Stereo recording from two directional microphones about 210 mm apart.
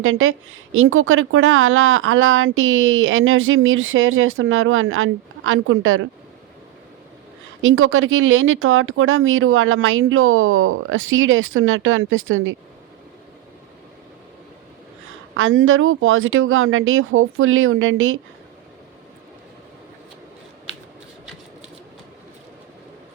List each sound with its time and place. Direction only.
0.0 s a woman's voice: 75° right (ahead or behind)
7.6 s a woman's voice: 75° right (ahead or behind)
15.4 s a woman's voice: 70° right (ahead or behind)